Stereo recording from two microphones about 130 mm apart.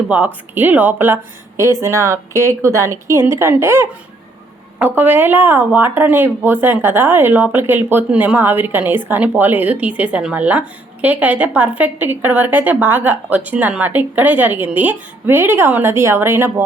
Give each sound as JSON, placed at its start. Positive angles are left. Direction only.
{"t": 0.1, "sound": "a woman's voice", "side_deg": -10}
{"t": 4.9, "sound": "a woman's voice", "side_deg": -15}